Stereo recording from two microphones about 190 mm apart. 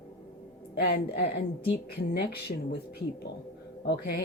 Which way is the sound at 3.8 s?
55° left (ahead or behind).